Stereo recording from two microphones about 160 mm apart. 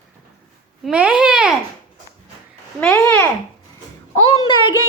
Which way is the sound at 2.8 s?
10° left (ahead or behind).